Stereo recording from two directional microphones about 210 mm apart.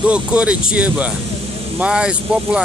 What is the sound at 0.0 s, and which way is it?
Speech, 5° right (ahead or behind).